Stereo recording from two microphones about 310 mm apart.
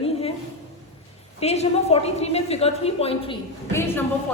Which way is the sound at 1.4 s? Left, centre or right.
Left.